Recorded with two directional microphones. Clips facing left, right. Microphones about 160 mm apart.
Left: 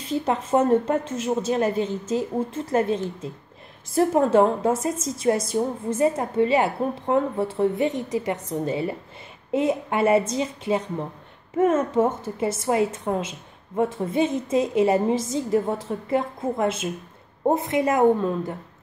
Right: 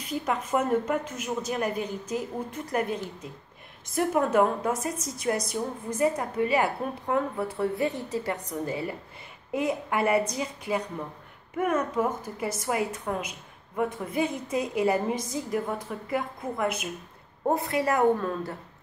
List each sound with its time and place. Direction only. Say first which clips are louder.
0.0 s a woman's voice: left 5 dB; 30° left (ahead or behind)